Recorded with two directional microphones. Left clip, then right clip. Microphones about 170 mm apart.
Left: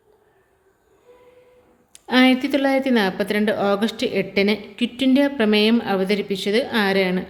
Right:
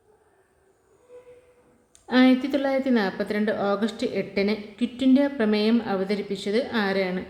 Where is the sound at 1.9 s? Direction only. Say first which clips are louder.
Left 3 dB; 15° left (ahead or behind).